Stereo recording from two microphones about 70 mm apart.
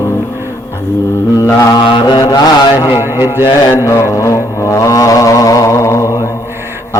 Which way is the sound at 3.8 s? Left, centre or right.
Left.